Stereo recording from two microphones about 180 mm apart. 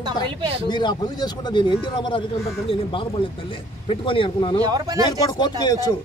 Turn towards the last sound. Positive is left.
turn(degrees=20)  # may be behind; listen again after turning